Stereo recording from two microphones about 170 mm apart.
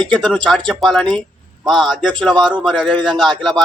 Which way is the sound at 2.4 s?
25° right (ahead or behind).